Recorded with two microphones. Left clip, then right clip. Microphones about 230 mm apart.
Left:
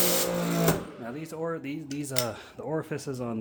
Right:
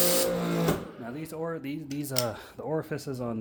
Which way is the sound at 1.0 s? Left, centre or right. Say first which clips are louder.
Left 1 dB; centre.